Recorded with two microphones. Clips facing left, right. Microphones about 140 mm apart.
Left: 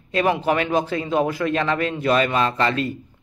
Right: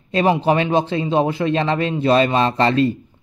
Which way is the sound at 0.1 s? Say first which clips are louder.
Right 3 dB; 25° right (ahead or behind).